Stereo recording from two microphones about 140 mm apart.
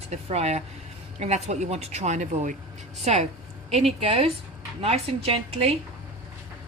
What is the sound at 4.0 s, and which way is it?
Speech, 45° right (ahead or behind).